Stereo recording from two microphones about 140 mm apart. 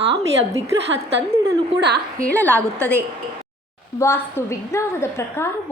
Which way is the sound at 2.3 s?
10° left (ahead or behind).